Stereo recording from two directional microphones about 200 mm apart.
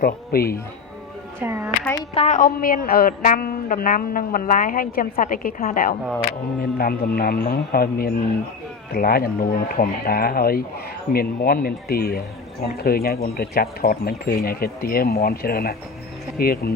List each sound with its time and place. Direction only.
0.0 s speech: 50° left (ahead or behind)
1.4 s speech: 10° right (ahead or behind)
2.1 s a woman's voice: 35° left (ahead or behind)